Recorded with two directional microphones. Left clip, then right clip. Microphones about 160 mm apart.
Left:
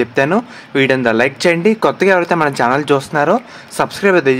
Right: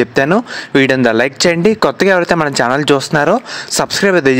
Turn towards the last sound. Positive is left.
turn(degrees=-45)  # may be behind; listen again after turning